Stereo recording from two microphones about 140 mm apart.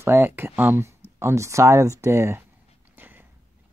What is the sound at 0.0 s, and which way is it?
Speech, 15° right (ahead or behind).